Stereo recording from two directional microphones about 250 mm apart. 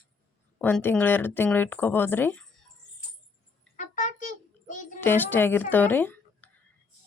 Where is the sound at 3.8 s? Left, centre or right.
Left.